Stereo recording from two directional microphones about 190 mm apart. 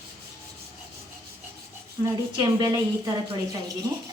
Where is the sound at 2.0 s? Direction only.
20° right (ahead or behind).